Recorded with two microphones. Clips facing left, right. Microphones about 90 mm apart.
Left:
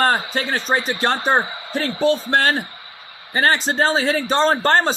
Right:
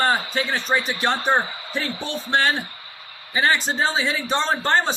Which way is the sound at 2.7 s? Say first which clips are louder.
Left 2 dB; 20° left (ahead or behind).